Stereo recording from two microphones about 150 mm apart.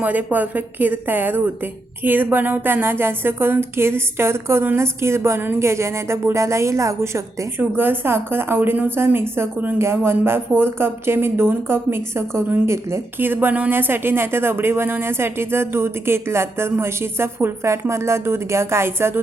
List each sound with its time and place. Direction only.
0.0 s a woman's voice: 10° right (ahead or behind)